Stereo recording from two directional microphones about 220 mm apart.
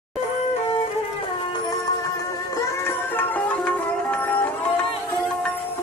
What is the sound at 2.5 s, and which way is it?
Music, 10° left (ahead or behind).